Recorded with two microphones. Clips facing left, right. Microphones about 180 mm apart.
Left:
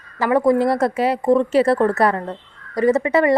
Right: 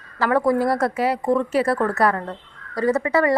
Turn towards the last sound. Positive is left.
turn(degrees=20)  # may be behind; listen again after turning